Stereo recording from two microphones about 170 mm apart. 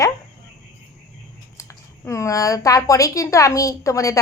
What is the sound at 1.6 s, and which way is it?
A woman's voice, 15° left (ahead or behind).